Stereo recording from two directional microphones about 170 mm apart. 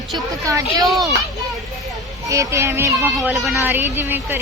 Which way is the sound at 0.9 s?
Centre (ahead or behind).